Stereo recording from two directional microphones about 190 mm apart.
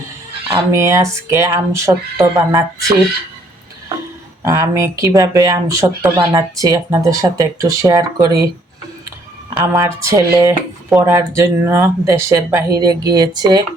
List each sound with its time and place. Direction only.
0.7 s speech: 15° right (ahead or behind)
4.4 s speech: 15° right (ahead or behind)
9.6 s speech: 15° right (ahead or behind)